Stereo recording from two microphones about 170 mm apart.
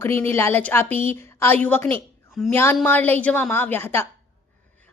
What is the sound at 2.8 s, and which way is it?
A woman's voice, 10° left (ahead or behind).